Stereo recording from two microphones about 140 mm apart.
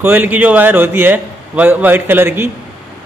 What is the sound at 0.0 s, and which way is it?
A man's voice, 15° right (ahead or behind).